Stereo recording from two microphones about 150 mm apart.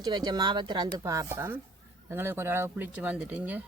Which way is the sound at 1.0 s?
20° right (ahead or behind).